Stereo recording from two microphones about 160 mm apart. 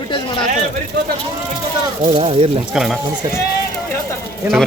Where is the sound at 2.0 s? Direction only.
40° right (ahead or behind).